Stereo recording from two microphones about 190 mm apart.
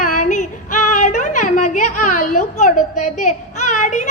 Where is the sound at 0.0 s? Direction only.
40° left (ahead or behind).